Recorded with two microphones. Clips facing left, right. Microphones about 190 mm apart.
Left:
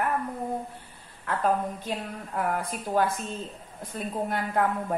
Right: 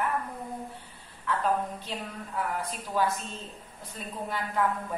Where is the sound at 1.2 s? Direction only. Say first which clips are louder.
Left 2 dB; 50° left (ahead or behind).